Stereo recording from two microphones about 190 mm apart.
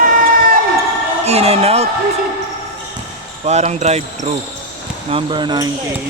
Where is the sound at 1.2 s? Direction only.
35° right (ahead or behind).